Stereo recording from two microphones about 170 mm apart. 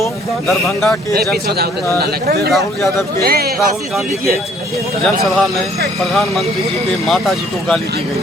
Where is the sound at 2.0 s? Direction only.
65° right (ahead or behind).